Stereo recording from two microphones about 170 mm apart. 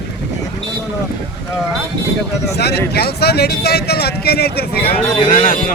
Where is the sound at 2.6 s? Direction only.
70° left (ahead or behind).